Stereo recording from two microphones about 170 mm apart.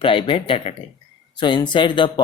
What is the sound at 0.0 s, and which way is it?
Speech, 30° left (ahead or behind).